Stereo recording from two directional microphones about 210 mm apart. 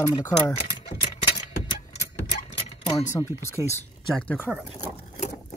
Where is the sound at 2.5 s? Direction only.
30° left (ahead or behind).